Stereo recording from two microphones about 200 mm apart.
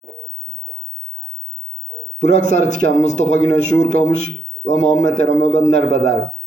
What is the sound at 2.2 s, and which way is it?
A man's voice, 35° left (ahead or behind).